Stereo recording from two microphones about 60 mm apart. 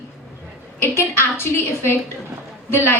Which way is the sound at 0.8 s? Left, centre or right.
Left.